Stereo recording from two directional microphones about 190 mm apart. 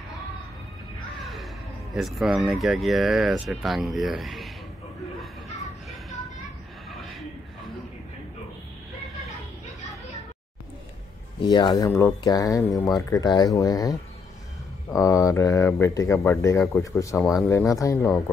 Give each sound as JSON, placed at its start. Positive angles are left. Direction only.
{"t": 1.2, "sound": "music", "side_deg": 0}
{"t": 2.0, "sound": "speech", "side_deg": 0}
{"t": 11.4, "sound": "speech", "side_deg": 20}
{"t": 17.2, "sound": "speech", "side_deg": 0}
{"t": 17.5, "sound": "speech", "side_deg": 15}